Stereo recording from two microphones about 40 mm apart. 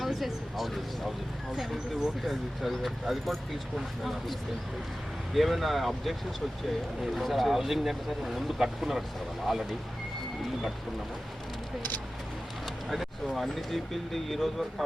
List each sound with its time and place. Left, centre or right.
0.0 s a sound: centre
2.2 s speech: centre
12.6 s vehicle: centre
13.3 s speech: centre